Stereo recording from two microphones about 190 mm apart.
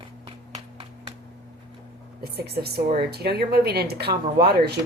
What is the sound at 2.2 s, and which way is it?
A woman's voice, 55° right (ahead or behind).